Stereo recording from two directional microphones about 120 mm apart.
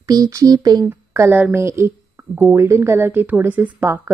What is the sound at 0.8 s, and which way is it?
Speech, 20° right (ahead or behind).